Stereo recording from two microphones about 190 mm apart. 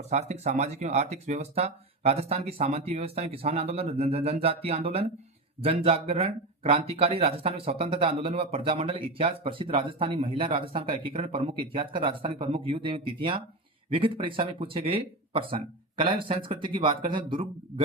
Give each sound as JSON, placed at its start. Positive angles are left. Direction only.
{"t": 0.1, "sound": "speech", "side_deg": -35}